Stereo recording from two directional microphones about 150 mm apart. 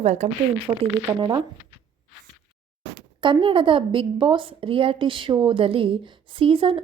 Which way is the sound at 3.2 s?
35° right (ahead or behind).